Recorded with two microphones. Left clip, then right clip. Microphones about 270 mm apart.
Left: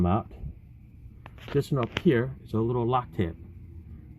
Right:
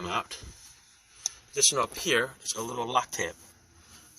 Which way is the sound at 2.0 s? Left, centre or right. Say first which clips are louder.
Left 1 dB; centre.